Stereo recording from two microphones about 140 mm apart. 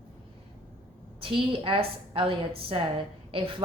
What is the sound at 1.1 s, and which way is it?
Speech, 40° right (ahead or behind).